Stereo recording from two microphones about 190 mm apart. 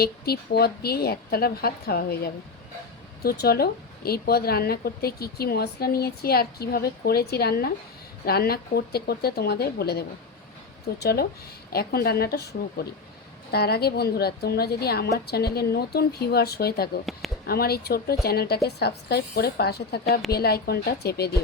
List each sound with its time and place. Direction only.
0.0 s a woman's voice: 55° left (ahead or behind)